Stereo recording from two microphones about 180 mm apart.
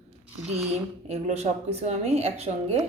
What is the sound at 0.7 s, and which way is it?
Speech, 35° right (ahead or behind).